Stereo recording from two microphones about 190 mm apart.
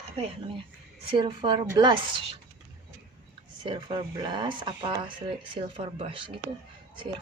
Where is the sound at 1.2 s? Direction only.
25° right (ahead or behind).